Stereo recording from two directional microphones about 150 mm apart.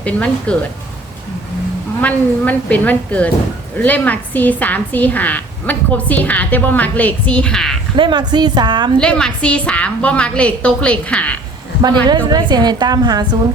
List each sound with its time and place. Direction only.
0.0 s a woman's voice: 10° left (ahead or behind)
2.0 s a woman's voice: 10° left (ahead or behind)
7.9 s a woman's voice: 30° right (ahead or behind)
9.0 s a woman's voice: 5° left (ahead or behind)
12.0 s a woman's voice: 30° right (ahead or behind)